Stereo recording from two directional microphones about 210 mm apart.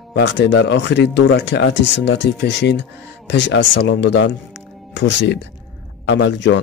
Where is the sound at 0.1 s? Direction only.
55° left (ahead or behind).